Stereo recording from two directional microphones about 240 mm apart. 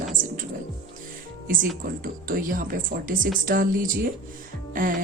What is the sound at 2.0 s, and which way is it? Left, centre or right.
A woman's voice, right.